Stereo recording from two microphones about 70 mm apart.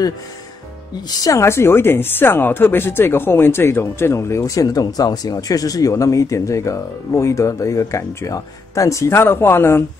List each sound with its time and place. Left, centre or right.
1.4 s speech: left